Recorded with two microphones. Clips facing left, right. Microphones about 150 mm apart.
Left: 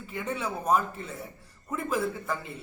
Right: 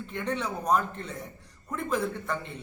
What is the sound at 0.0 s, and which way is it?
Speech, 5° left (ahead or behind).